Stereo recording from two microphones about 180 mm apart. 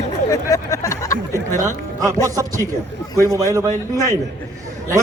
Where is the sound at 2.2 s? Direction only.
20° right (ahead or behind).